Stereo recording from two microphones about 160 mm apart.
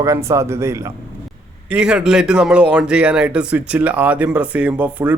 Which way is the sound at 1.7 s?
5° right (ahead or behind).